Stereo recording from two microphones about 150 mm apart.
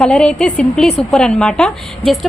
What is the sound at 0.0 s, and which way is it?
Speech, 5° left (ahead or behind).